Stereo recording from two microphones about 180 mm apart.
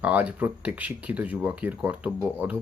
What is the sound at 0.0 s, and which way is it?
Speech, 10° right (ahead or behind).